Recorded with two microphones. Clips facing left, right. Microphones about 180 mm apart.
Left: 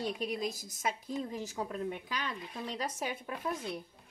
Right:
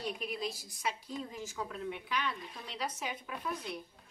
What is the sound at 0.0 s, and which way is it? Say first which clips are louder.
Speech: left 3 dB; 35° left (ahead or behind).